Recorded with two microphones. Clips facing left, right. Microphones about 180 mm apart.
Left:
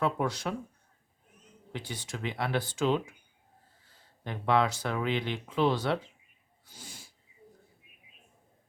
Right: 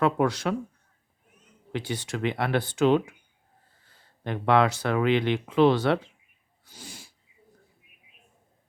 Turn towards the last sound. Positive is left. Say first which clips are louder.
# right 5 dB
turn(degrees=-75)  # may be behind; listen again after turning